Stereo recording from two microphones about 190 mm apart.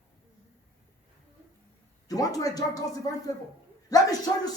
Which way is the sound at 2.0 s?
20° left (ahead or behind).